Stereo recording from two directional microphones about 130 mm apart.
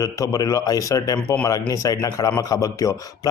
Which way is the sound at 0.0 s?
25° left (ahead or behind).